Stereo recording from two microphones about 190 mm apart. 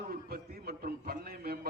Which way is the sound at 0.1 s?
50° right (ahead or behind).